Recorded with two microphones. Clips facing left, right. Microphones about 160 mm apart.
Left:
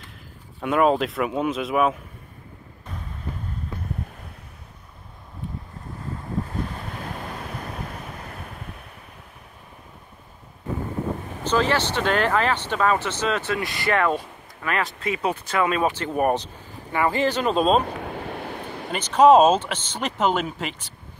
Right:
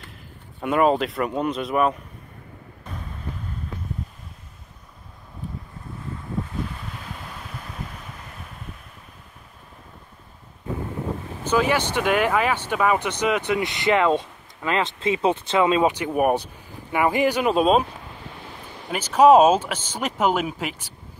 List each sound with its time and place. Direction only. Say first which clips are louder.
0.6 s a man's voice: even; centre (ahead or behind)
7.0 s waves: left 5 dB; 50° left (ahead or behind)
11.4 s speech: right 1 dB; 10° right (ahead or behind)
17.8 s vehicle: left 9 dB; 65° left (ahead or behind)
18.9 s speech: even; 10° right (ahead or behind)